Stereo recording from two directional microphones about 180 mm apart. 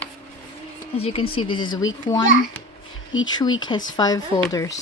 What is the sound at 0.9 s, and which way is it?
Speech, 35° left (ahead or behind).